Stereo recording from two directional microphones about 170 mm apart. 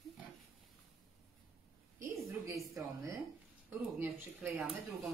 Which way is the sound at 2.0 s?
15° right (ahead or behind).